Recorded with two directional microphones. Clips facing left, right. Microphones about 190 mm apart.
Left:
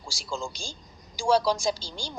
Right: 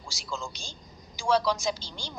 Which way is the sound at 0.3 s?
30° left (ahead or behind).